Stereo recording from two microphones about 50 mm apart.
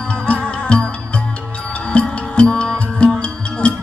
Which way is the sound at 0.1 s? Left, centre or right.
Left.